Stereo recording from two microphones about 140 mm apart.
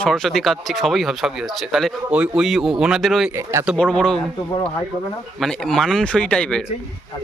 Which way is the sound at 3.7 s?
5° left (ahead or behind).